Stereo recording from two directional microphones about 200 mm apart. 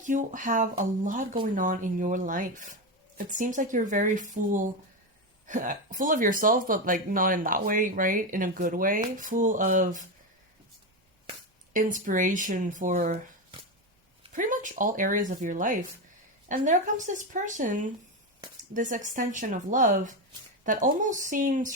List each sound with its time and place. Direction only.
0.1 s speech: 40° right (ahead or behind)
11.7 s speech: 40° right (ahead or behind)
14.3 s speech: 40° right (ahead or behind)